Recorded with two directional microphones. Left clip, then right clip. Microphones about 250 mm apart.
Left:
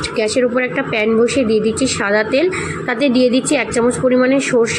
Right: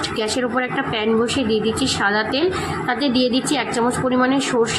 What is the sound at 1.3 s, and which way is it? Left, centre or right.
Speech, left.